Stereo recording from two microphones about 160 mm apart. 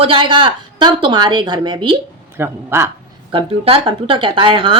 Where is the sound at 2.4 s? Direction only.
15° right (ahead or behind).